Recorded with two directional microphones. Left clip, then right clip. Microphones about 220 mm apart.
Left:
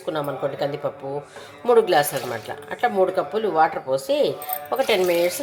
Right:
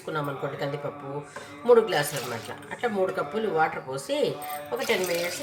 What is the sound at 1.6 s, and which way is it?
Speech, 25° left (ahead or behind).